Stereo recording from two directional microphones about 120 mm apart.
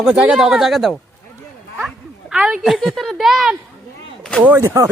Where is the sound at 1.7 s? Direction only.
5° right (ahead or behind).